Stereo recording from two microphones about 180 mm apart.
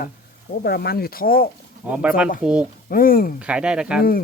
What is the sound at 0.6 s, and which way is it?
Speech, 60° left (ahead or behind).